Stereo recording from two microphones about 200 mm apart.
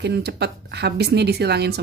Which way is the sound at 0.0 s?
55° right (ahead or behind).